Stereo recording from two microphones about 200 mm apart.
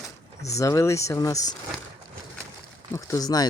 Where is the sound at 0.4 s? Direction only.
15° left (ahead or behind).